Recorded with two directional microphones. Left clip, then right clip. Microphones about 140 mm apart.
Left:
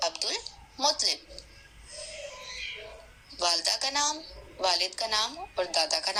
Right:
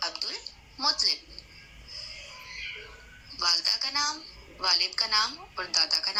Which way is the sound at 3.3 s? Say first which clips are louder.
Right 1 dB; 15° left (ahead or behind).